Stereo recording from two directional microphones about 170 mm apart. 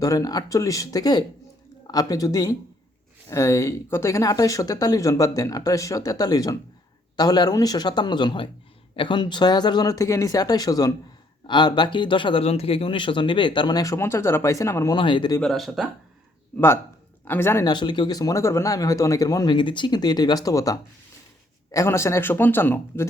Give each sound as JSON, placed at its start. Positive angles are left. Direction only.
{"t": 0.0, "sound": "speech", "side_deg": 20}
{"t": 14.9, "sound": "speech", "side_deg": 30}
{"t": 15.4, "sound": "speech", "side_deg": 0}
{"t": 17.2, "sound": "speech", "side_deg": 15}
{"t": 17.7, "sound": "speech", "side_deg": 25}